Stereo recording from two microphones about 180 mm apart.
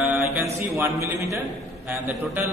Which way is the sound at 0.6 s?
15° right (ahead or behind).